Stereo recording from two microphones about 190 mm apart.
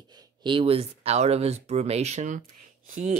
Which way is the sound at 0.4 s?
25° right (ahead or behind).